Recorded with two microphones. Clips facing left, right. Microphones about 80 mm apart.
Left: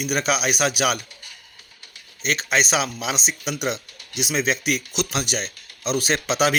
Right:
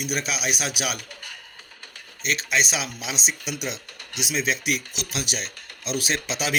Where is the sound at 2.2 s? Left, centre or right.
Left.